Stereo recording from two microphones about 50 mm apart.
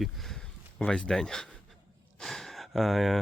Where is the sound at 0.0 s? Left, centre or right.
Centre.